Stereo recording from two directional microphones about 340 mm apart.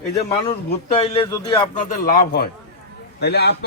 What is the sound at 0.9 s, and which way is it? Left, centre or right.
Speech, centre.